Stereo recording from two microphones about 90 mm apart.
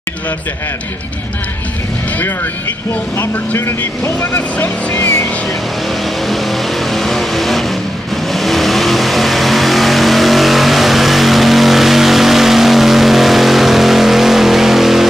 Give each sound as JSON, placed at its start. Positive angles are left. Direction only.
{"t": 3.2, "sound": "speech", "side_deg": 30}
{"t": 6.2, "sound": "vehicle", "side_deg": 0}